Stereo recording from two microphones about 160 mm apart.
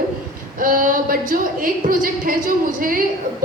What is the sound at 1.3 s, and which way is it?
A woman's voice, 60° right (ahead or behind).